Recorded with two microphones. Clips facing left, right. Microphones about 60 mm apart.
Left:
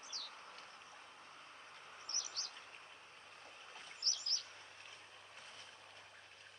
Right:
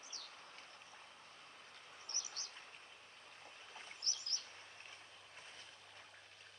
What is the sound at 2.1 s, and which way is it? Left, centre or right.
Bird, right.